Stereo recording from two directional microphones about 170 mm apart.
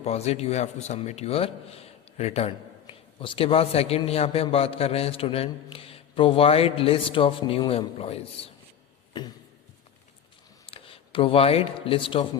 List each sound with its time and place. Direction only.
0.0 s a man's voice: 40° left (ahead or behind)
9.2 s a sound: 25° left (ahead or behind)
10.7 s speech: 35° left (ahead or behind)